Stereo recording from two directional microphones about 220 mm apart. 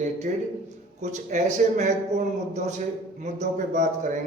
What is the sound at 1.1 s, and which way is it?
Speech, 35° right (ahead or behind).